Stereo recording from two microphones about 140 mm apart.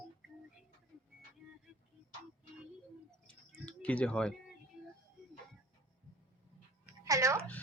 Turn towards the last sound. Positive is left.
turn(degrees=-20)  # may be behind; listen again after turning